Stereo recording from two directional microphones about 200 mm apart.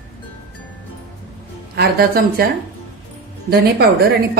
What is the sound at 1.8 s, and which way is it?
Speech, 50° right (ahead or behind).